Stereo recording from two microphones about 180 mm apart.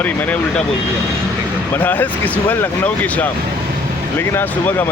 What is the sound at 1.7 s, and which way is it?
Speech, 10° left (ahead or behind).